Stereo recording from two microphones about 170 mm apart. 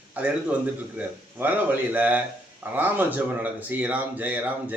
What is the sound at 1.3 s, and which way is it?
Speech, 10° right (ahead or behind).